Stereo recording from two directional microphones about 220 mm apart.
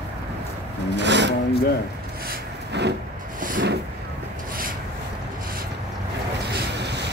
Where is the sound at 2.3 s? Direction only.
50° right (ahead or behind).